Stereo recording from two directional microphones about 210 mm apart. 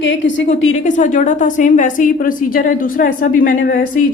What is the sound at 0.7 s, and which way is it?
A woman's voice, 35° left (ahead or behind).